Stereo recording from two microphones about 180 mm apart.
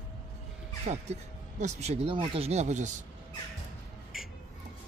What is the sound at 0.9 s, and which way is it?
Speech, 35° right (ahead or behind).